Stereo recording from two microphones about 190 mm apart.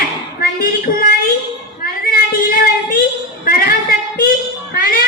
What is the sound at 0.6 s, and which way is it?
Child singing, 50° left (ahead or behind).